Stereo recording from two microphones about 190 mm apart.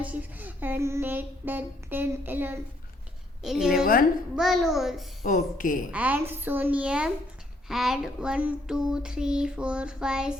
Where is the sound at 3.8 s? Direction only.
50° left (ahead or behind).